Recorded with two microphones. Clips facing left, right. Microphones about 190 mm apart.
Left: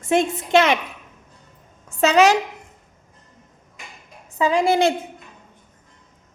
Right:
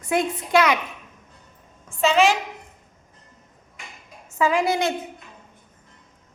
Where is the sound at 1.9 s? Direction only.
40° left (ahead or behind).